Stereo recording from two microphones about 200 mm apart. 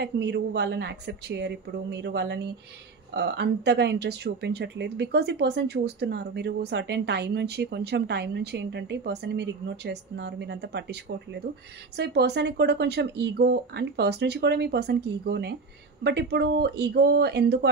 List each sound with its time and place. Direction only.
0.0 s speech: 55° right (ahead or behind)